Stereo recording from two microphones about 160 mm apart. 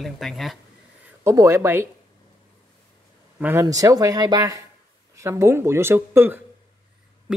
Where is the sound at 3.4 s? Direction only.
15° right (ahead or behind).